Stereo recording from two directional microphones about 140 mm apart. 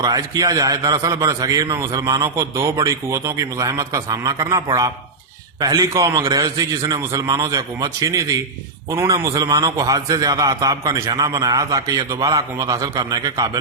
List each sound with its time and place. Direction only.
0.0 s a man's voice: 25° right (ahead or behind)